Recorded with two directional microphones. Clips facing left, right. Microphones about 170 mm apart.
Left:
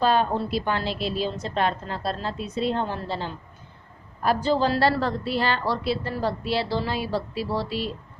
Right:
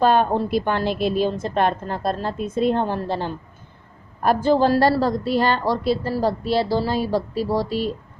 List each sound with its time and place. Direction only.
0.0 s a woman's voice: 50° right (ahead or behind)